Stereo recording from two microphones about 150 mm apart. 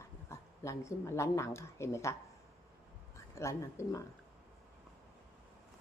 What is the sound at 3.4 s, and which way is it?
Speech, 20° left (ahead or behind).